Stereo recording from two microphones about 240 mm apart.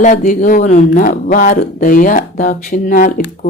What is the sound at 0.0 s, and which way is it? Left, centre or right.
Speech, left.